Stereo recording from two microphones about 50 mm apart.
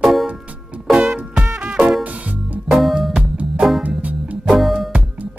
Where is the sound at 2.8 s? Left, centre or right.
Centre.